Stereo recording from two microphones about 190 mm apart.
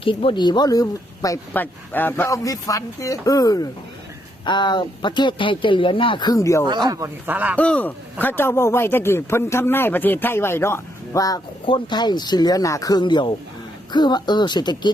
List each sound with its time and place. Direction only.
0.0 s speech: 25° left (ahead or behind)
6.7 s speech: 20° right (ahead or behind)
7.5 s a man's voice: 5° left (ahead or behind); by 14.9 s 25° left (ahead or behind)